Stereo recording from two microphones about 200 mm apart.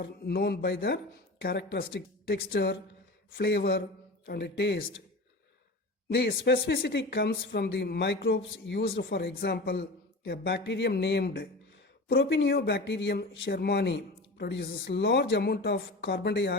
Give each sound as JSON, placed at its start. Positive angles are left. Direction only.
{"t": 0.0, "sound": "speech", "side_deg": 55}
{"t": 6.1, "sound": "speech", "side_deg": 55}